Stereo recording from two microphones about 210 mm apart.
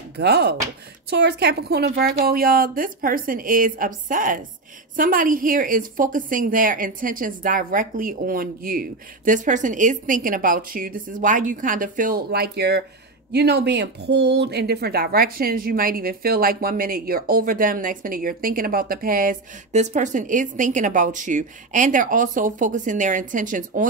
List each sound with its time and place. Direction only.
0.2 s a woman's voice: 50° right (ahead or behind)